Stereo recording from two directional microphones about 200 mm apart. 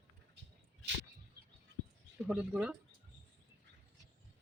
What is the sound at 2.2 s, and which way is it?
Speech, 5° right (ahead or behind).